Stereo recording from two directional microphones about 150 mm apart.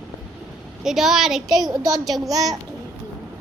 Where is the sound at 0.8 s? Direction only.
5° right (ahead or behind).